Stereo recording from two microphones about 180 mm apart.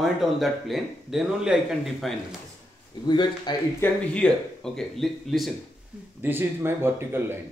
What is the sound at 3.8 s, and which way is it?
Speech, 5° left (ahead or behind).